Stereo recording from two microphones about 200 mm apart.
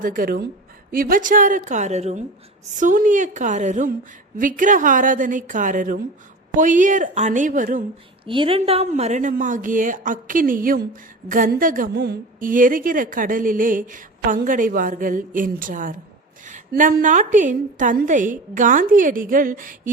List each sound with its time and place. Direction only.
0.0 s a woman's voice: 45° right (ahead or behind)
8.3 s a woman's voice: 25° right (ahead or behind); by 19.9 s 40° right (ahead or behind)